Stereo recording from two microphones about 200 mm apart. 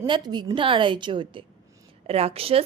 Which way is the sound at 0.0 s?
20° right (ahead or behind).